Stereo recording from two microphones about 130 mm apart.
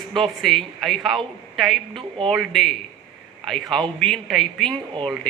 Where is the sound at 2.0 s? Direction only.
40° right (ahead or behind).